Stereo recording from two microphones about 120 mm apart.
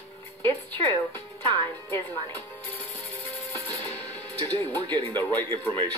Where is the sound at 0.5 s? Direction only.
15° left (ahead or behind).